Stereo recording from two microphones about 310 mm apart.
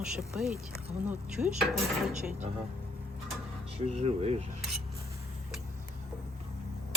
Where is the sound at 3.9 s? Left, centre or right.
Centre.